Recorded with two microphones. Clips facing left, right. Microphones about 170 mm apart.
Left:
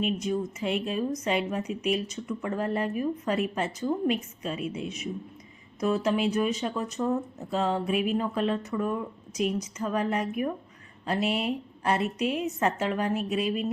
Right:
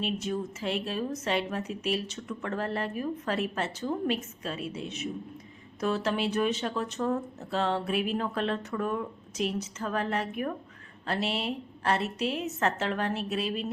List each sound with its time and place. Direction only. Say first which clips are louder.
0.0 s speech: left 3 dB; 5° left (ahead or behind)
1.6 s speech: left 3 dB; 5° right (ahead or behind)
2.4 s speech: left 3 dB; 10° left (ahead or behind)
11.2 s speech: left 4 dB; centre (ahead or behind)